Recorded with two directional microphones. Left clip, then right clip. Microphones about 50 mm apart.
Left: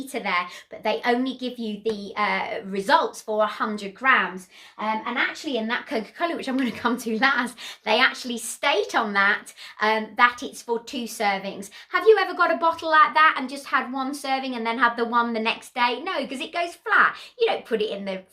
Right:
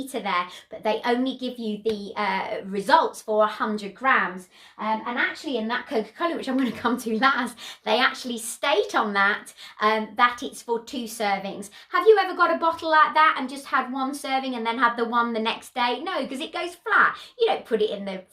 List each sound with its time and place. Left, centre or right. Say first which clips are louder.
0.0 s a woman's voice: left 1 dB; right
5.3 s a woman's voice: left 1 dB; left
5.9 s a woman's voice: right 1 dB; centre
6.4 s a woman's voice: even; right